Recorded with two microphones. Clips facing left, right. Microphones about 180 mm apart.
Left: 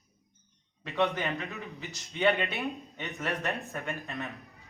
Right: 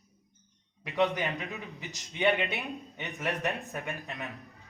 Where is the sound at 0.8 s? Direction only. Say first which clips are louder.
Right 1 dB; 15° right (ahead or behind).